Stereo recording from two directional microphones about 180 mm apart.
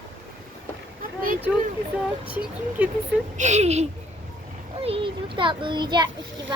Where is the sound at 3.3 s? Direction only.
40° right (ahead or behind).